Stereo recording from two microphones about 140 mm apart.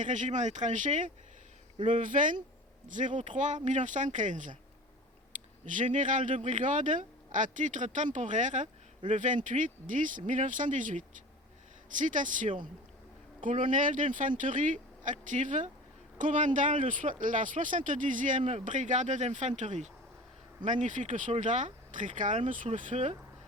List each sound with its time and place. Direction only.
0.0 s speech: 60° right (ahead or behind)
5.6 s speech: 65° right (ahead or behind)